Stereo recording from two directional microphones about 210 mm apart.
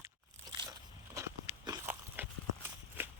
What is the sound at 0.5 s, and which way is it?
Crunch, 20° right (ahead or behind).